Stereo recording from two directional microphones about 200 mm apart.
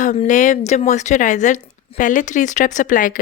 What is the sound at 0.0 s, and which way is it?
A woman's voice, 35° left (ahead or behind).